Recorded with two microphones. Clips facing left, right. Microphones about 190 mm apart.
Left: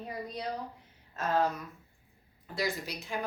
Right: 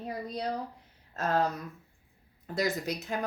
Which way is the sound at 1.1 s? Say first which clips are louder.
Right 1 dB; 40° right (ahead or behind).